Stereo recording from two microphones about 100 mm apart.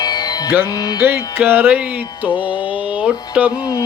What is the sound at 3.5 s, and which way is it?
Music, 45° left (ahead or behind).